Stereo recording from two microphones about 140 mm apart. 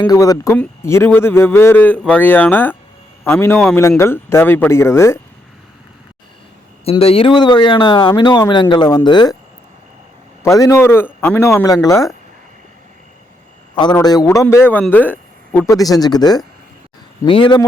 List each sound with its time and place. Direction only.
0.1 s a man's voice: 25° left (ahead or behind)
7.0 s speech: 45° left (ahead or behind)
10.4 s a man's voice: 20° left (ahead or behind)
11.4 s speech: 25° left (ahead or behind)
13.7 s speech: 30° left (ahead or behind)
14.4 s speech: 15° left (ahead or behind)
15.6 s speech: 25° left (ahead or behind)